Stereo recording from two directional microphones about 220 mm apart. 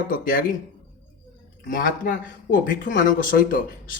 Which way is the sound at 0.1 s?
40° left (ahead or behind).